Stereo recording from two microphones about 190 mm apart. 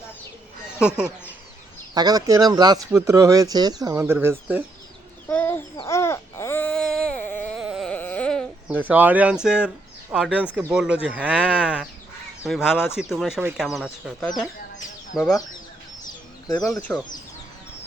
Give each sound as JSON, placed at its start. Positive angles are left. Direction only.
{"t": 0.8, "sound": "speech", "side_deg": -5}
{"t": 2.0, "sound": "speech", "side_deg": -20}
{"t": 5.3, "sound": "chicken", "side_deg": 10}
{"t": 5.9, "sound": "baby cry", "side_deg": 15}
{"t": 7.6, "sound": "carnatic music", "side_deg": -5}
{"t": 8.7, "sound": "speech", "side_deg": -10}
{"t": 16.7, "sound": "speech", "side_deg": 10}